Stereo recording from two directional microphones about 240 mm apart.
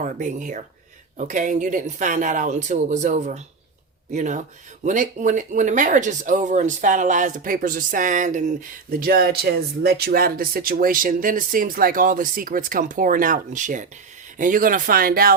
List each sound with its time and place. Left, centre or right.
0.0 s speech: right